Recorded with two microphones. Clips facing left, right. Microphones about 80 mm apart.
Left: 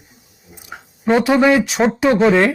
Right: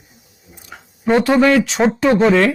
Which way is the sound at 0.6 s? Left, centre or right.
Centre.